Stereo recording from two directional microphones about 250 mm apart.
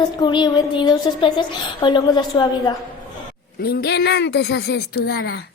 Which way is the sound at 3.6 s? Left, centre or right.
Left.